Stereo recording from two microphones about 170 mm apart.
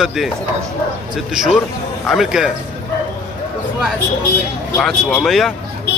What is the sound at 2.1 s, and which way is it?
Speech, 5° right (ahead or behind).